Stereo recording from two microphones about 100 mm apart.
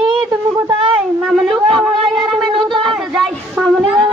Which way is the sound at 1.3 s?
Centre (ahead or behind).